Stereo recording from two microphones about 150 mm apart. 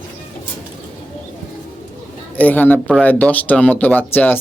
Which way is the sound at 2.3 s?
10° left (ahead or behind).